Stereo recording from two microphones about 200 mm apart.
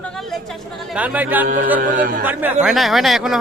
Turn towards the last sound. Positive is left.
turn(degrees=0)  # may be behind; listen again after turning